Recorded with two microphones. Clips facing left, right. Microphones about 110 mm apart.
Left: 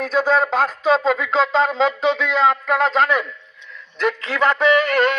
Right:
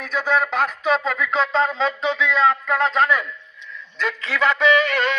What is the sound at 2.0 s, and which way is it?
Speech, 70° left (ahead or behind).